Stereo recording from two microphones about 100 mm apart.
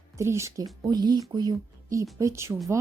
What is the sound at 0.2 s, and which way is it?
Speech, 30° right (ahead or behind).